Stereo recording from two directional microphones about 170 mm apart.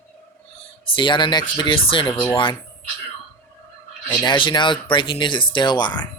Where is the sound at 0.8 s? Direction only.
30° left (ahead or behind).